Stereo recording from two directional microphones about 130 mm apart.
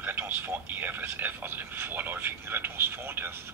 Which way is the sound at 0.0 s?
15° right (ahead or behind).